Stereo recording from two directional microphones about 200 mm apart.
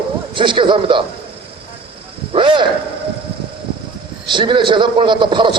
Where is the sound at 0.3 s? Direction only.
25° right (ahead or behind).